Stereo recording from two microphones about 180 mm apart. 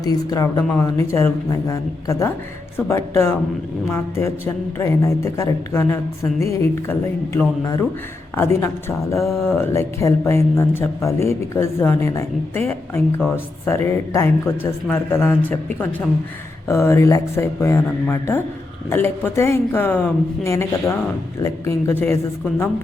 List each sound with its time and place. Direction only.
0.0 s a man's voice: 20° left (ahead or behind)
7.3 s a man's voice: 15° left (ahead or behind)